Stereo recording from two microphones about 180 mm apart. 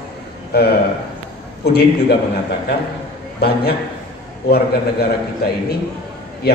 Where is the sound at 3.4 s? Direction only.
60° left (ahead or behind).